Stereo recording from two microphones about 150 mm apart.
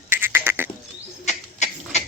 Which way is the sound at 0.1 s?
15° right (ahead or behind).